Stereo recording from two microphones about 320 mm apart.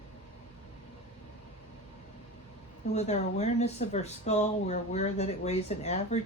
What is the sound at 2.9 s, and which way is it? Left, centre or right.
Speech, centre.